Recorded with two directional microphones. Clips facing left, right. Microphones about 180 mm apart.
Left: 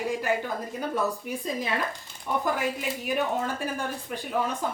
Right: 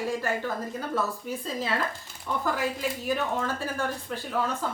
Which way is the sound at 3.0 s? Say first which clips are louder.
Left 2 dB; 15° left (ahead or behind).